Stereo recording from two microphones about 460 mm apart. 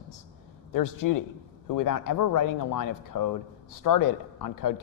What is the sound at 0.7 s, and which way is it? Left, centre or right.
Speech, left.